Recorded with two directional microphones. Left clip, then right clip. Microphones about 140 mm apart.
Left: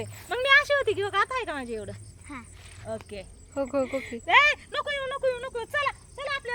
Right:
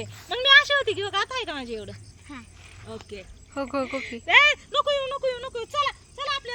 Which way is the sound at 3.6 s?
10° right (ahead or behind).